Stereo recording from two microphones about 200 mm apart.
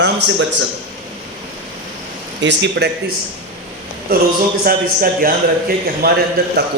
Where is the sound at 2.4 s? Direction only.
60° right (ahead or behind).